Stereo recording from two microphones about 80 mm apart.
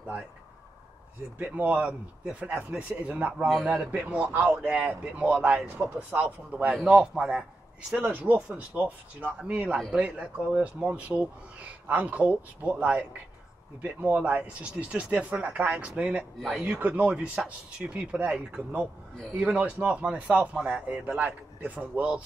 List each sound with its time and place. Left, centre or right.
1.4 s speech: centre
8.0 s speech: right
16.3 s speech: centre
16.6 s speech: centre